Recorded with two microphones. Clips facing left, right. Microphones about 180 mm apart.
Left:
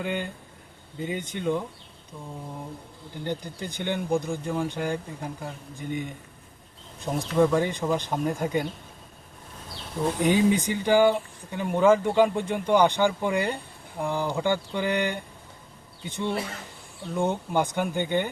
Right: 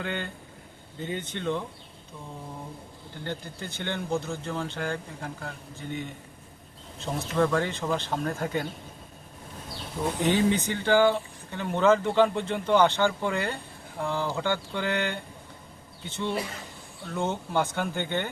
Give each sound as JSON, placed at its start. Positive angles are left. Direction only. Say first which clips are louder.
{"t": 0.0, "sound": "speech", "louder": "left 3 dB", "side_deg": 10}
{"t": 3.2, "sound": "speech", "louder": "left 4 dB", "side_deg": 15}
{"t": 10.2, "sound": "speech", "louder": "left 2 dB", "side_deg": 10}